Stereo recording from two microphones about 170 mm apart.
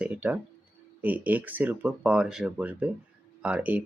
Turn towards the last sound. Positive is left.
turn(degrees=-10)  # may be behind; listen again after turning